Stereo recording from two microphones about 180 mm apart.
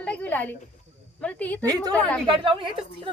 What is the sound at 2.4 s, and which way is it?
Speech, 25° right (ahead or behind).